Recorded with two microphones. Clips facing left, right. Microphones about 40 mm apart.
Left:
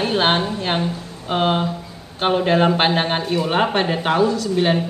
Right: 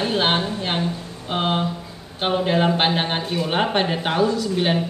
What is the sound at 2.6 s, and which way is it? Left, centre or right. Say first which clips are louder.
Speech: left 3 dB; centre.